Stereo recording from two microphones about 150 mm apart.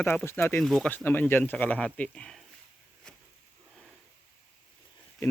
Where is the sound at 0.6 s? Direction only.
5° left (ahead or behind).